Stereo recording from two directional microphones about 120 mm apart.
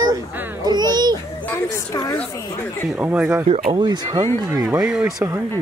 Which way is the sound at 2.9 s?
15° right (ahead or behind).